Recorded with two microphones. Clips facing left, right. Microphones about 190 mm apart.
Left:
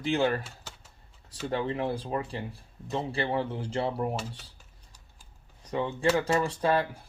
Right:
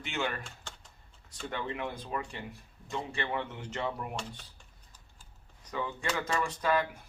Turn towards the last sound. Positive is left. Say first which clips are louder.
# left 3 dB
turn(degrees=30)  # may be behind; listen again after turning